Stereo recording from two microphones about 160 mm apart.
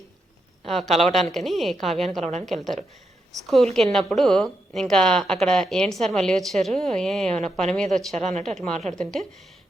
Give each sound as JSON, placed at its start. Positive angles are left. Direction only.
{"t": 0.6, "sound": "speech", "side_deg": 0}
{"t": 8.1, "sound": "speech", "side_deg": -45}
{"t": 8.4, "sound": "speech", "side_deg": 5}